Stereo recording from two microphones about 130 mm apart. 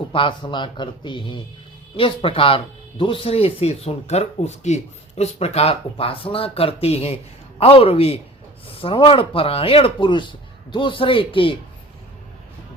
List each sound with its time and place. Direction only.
0.1 s speech: 40° left (ahead or behind)